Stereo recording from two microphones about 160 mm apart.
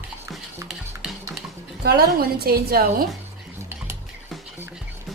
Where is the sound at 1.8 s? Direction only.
75° right (ahead or behind).